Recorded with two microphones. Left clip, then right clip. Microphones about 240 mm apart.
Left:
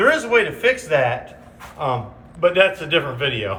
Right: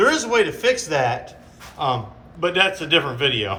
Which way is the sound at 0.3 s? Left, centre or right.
Centre.